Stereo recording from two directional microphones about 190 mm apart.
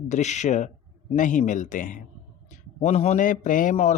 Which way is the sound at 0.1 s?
40° left (ahead or behind).